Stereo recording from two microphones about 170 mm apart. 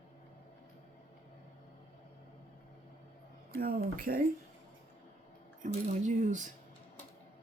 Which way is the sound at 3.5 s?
60° right (ahead or behind).